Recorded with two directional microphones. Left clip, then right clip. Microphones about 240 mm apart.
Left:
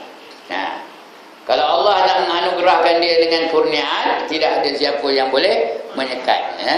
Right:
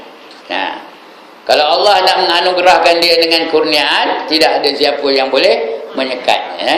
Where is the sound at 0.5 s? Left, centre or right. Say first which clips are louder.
Right 5 dB; centre.